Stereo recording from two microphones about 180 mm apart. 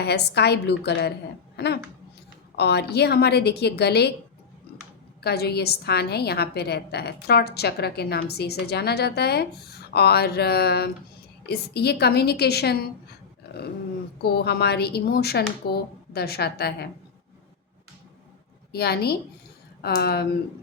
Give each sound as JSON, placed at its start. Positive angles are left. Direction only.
{"t": 0.0, "sound": "a woman's voice", "side_deg": 65}
{"t": 5.2, "sound": "a woman's voice", "side_deg": 65}
{"t": 14.2, "sound": "a woman's voice", "side_deg": 60}
{"t": 18.7, "sound": "a woman's voice", "side_deg": 60}